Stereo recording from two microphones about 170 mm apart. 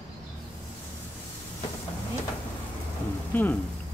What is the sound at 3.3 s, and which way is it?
Speech, 10° left (ahead or behind).